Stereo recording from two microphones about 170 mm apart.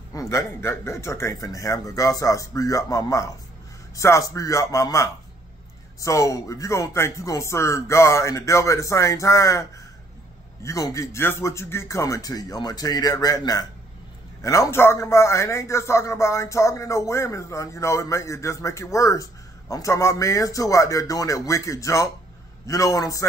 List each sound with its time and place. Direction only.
0.1 s a man's voice: 15° left (ahead or behind)